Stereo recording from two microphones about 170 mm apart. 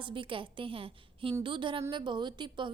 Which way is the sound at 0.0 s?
30° right (ahead or behind).